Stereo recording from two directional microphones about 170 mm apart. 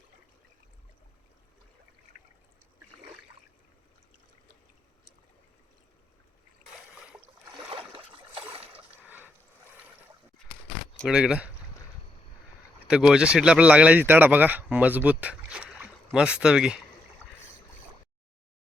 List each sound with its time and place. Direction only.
7.7 s boat: 30° right (ahead or behind)
9.0 s a sound: 10° right (ahead or behind)
10.9 s speech: centre (ahead or behind)
12.9 s speech: 5° right (ahead or behind)